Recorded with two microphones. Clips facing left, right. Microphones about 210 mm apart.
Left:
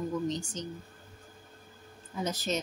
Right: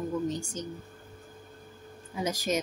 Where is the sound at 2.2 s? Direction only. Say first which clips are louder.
Right 3 dB; 10° right (ahead or behind).